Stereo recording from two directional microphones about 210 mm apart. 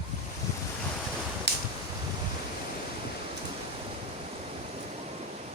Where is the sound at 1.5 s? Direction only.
55° right (ahead or behind).